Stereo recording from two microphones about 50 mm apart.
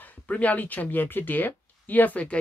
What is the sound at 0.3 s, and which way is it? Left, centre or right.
Speech, left.